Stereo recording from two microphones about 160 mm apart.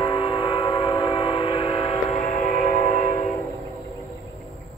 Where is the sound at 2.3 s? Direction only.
50° left (ahead or behind).